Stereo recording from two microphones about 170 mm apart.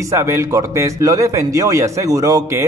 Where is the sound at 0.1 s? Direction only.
15° right (ahead or behind).